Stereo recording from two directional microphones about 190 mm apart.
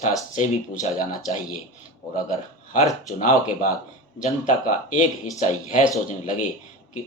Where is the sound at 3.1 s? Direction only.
45° left (ahead or behind).